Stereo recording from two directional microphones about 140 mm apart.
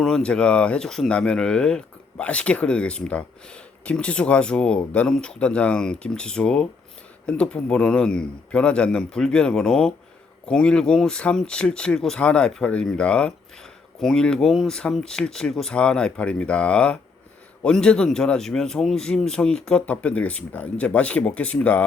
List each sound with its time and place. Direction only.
0.0 s speech: 5° left (ahead or behind)